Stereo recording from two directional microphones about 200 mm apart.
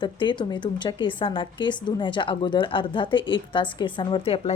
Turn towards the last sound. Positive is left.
turn(degrees=30)  # may be behind; listen again after turning